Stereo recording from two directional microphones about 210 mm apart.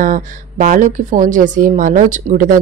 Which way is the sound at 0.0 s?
40° right (ahead or behind).